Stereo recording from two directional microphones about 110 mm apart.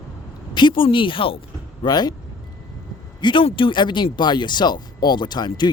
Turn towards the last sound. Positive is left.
turn(degrees=40)  # may be behind; listen again after turning